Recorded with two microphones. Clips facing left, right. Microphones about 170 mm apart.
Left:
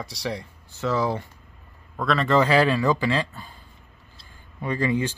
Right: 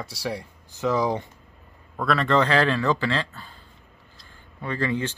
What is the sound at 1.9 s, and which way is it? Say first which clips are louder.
A man's voice: left 1 dB; centre (ahead or behind).